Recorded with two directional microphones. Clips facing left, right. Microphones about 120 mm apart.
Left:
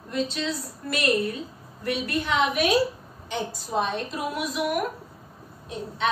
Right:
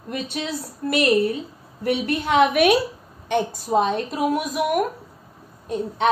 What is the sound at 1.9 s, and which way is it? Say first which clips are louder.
A woman's voice: right 5 dB; 65° right (ahead or behind).